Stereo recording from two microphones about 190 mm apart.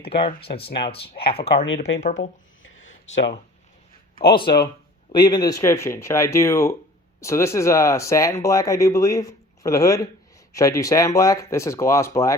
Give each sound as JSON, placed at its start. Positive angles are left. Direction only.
{"t": 0.1, "sound": "speech", "side_deg": 30}
{"t": 4.1, "sound": "a man's voice", "side_deg": 55}
{"t": 5.1, "sound": "speech", "side_deg": 20}